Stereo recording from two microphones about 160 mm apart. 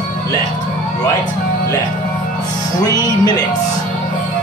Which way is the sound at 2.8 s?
25° left (ahead or behind).